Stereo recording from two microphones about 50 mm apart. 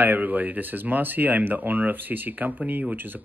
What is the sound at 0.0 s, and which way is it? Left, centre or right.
Speech, right.